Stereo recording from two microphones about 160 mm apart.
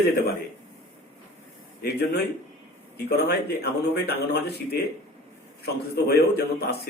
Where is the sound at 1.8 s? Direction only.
90° left.